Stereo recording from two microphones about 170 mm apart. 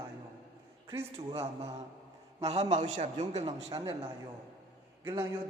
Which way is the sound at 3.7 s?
20° right (ahead or behind).